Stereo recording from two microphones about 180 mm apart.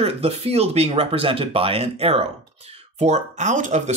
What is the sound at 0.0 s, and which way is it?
Speech, 35° right (ahead or behind).